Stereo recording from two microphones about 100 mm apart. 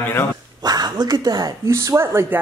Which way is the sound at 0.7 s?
45° right (ahead or behind).